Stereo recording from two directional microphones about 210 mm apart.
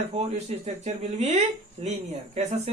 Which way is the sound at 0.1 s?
30° right (ahead or behind).